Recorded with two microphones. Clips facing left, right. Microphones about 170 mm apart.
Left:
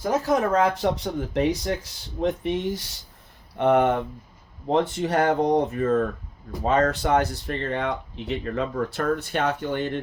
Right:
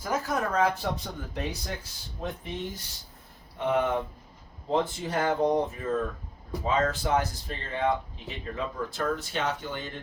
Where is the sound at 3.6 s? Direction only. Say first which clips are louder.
Left 7 dB; 65° left (ahead or behind).